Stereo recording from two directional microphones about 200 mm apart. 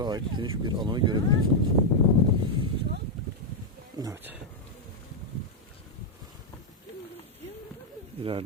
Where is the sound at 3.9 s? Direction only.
15° right (ahead or behind).